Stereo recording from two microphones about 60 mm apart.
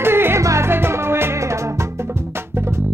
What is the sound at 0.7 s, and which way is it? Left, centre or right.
Music, right.